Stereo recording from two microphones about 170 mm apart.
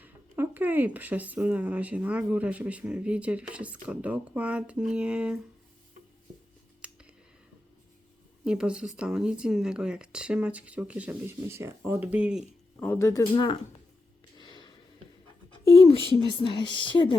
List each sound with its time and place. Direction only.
0.0 s speech: 10° right (ahead or behind)
6.8 s a sound: 5° right (ahead or behind)
8.4 s speech: 5° right (ahead or behind)
12.8 s speech: 15° left (ahead or behind)
14.3 s a sound: 25° left (ahead or behind)
16.3 s speech: 30° left (ahead or behind)